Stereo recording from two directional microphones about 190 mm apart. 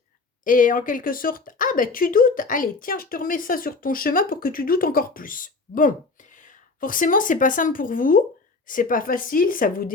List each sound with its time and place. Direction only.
0.4 s speech: 45° left (ahead or behind)